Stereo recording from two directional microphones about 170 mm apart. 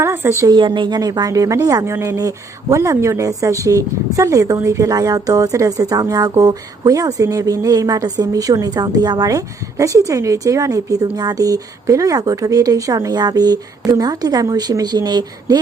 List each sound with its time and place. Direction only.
0.0 s a woman's voice: 15° right (ahead or behind)